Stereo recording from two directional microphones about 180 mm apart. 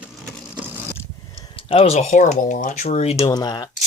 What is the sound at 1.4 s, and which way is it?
Speech, 30° left (ahead or behind).